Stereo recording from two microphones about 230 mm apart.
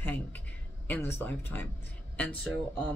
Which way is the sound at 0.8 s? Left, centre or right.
Centre.